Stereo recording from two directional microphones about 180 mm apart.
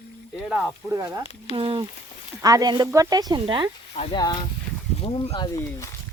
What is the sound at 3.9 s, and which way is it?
Speech, 35° left (ahead or behind).